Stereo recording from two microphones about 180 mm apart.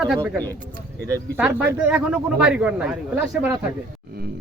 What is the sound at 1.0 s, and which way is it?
Speech, 10° right (ahead or behind).